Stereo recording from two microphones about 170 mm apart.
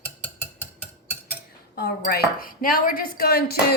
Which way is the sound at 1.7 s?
65° left (ahead or behind).